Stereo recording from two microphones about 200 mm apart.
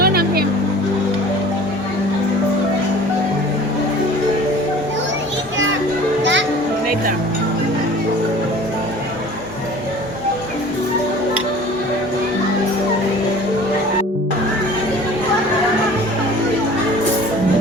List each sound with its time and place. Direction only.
0.0 s music: 50° right (ahead or behind)